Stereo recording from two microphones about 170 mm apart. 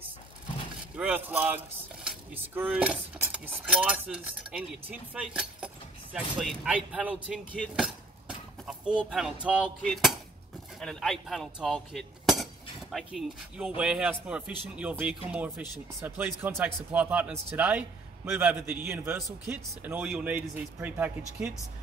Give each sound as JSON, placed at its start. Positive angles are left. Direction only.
{"t": 0.9, "sound": "speech", "side_deg": -10}
{"t": 7.7, "sound": "a sound", "side_deg": -5}
{"t": 10.8, "sound": "speech", "side_deg": 5}